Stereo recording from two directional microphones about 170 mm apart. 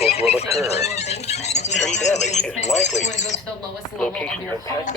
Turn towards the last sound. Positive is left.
turn(degrees=45)  # may be behind; listen again after turning